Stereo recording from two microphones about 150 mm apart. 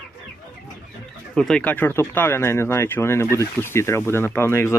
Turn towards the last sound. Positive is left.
turn(degrees=15)  # may be behind; listen again after turning